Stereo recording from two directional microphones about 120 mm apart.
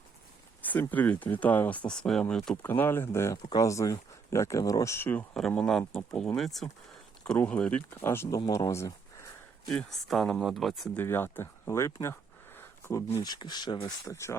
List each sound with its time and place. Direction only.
0.6 s speech: 15° left (ahead or behind)
1.9 s speech: 5° left (ahead or behind)
2.6 s speech: 15° left (ahead or behind)
5.4 s speech: 5° left (ahead or behind); by 8.4 s 20° left (ahead or behind)
8.4 s speech: 30° left (ahead or behind)
9.6 s speech: 5° left (ahead or behind)
10.9 s speech: 20° left (ahead or behind)
12.5 s a sound: 25° left (ahead or behind)
13.2 s speech: 35° left (ahead or behind)
14.1 s speech: 25° left (ahead or behind)